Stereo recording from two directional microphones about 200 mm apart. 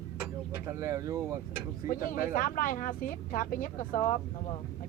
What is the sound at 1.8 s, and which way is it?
Speech, 45° left (ahead or behind).